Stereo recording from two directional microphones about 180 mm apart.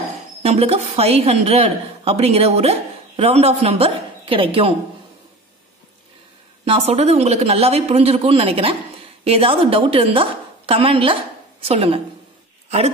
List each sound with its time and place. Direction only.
0.4 s a woman's voice: 35° right (ahead or behind)
6.6 s a woman's voice: 35° right (ahead or behind)
12.6 s a sound: 35° right (ahead or behind)